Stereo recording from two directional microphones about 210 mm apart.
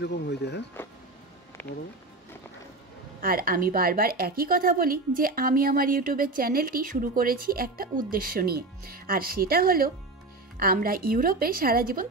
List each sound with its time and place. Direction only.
0.0 s speech: 50° left (ahead or behind)
1.6 s speech: 10° left (ahead or behind)
3.2 s a woman's voice: 45° right (ahead or behind)